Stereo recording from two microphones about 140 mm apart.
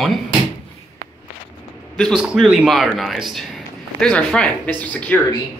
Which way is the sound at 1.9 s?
5° left (ahead or behind).